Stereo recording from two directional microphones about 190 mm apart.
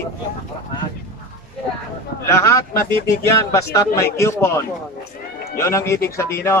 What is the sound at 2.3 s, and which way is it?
Speech, 15° left (ahead or behind).